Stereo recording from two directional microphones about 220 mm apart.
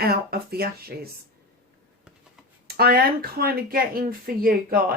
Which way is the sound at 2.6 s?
45° right (ahead or behind).